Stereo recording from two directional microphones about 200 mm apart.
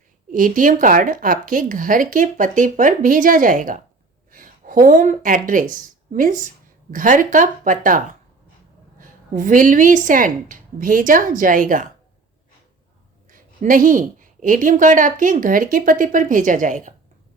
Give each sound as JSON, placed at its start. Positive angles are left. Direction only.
{"t": 0.3, "sound": "speech", "side_deg": -40}
{"t": 4.3, "sound": "a sound", "side_deg": -40}
{"t": 5.5, "sound": "a woman's voice", "side_deg": -40}
{"t": 13.3, "sound": "a woman's voice", "side_deg": -40}